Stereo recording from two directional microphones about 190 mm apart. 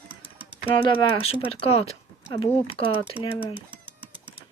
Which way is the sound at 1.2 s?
30° left (ahead or behind).